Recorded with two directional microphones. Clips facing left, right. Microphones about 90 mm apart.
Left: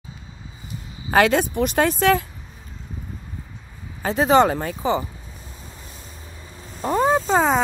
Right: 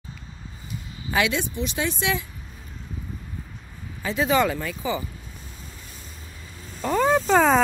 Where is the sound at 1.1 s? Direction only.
50° left (ahead or behind).